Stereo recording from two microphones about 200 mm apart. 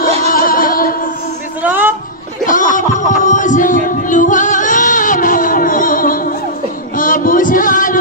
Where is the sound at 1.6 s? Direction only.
10° right (ahead or behind).